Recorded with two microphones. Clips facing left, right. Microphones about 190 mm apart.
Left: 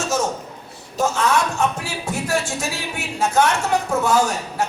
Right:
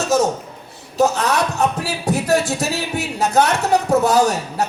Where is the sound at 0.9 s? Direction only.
40° right (ahead or behind).